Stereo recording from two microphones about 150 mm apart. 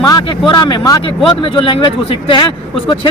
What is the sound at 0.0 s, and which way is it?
Speech, 30° left (ahead or behind).